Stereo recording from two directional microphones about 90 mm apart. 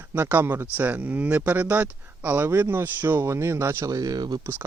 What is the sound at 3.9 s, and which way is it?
Speech, 45° right (ahead or behind).